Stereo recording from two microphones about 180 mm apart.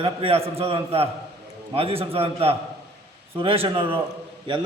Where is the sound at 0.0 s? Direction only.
35° right (ahead or behind).